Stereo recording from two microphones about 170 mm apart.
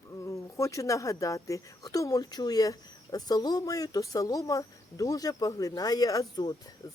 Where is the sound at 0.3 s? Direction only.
20° left (ahead or behind).